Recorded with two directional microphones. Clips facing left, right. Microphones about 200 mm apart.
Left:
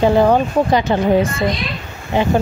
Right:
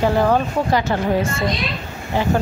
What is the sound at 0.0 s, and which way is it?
Speech, 20° left (ahead or behind).